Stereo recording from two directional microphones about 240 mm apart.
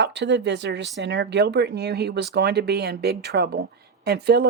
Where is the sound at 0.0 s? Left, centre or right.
Right.